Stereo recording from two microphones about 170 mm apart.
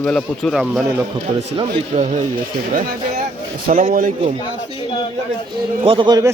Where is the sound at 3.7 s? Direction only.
50° right (ahead or behind).